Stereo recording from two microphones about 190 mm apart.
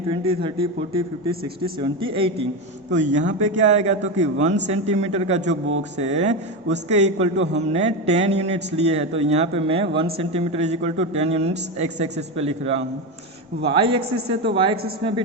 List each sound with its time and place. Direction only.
0.1 s a man's voice: 25° right (ahead or behind)
2.9 s a man's voice: 40° right (ahead or behind)